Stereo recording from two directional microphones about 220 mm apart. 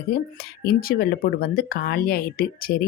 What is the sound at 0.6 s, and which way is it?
Speech, 45° left (ahead or behind).